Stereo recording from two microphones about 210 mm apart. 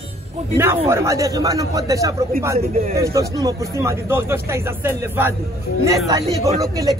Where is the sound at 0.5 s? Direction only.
10° right (ahead or behind).